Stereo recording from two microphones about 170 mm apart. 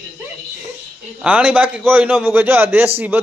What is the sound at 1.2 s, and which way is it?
Speech, 5° right (ahead or behind).